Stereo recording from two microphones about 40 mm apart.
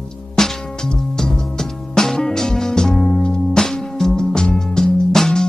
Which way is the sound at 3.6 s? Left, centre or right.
Centre.